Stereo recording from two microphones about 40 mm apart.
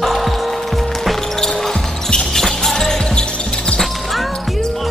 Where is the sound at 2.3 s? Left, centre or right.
Centre.